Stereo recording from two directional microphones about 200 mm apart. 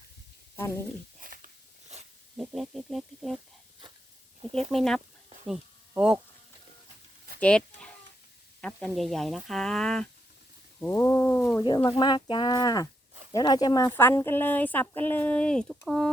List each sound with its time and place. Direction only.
0.5 s speech: 15° left (ahead or behind)
1.2 s a sound: 45° right (ahead or behind)
1.9 s snake: 35° right (ahead or behind)
2.3 s speech: 5° right (ahead or behind)
4.7 s speech: centre (ahead or behind)
7.3 s a sound: 5° left (ahead or behind)
8.6 s a woman's voice: centre (ahead or behind)
11.6 s a woman's voice: 25° left (ahead or behind); by 16.1 s centre (ahead or behind)